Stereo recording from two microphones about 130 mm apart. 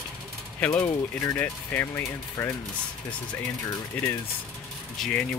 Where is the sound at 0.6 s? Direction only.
15° left (ahead or behind).